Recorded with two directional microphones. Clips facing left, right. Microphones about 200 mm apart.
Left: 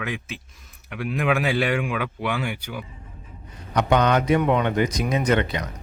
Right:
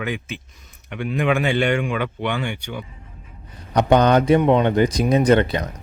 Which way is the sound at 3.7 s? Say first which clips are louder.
Right 4 dB; 35° right (ahead or behind).